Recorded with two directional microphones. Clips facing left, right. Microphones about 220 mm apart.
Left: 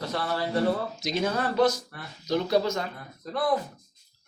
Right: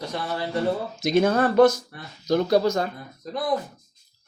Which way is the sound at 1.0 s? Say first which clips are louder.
Right 8 dB; 50° right (ahead or behind).